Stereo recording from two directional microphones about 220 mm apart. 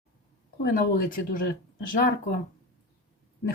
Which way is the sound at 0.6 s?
40° left (ahead or behind).